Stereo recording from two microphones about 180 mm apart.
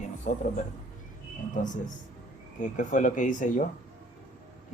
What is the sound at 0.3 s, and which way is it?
Speech, 45° left (ahead or behind).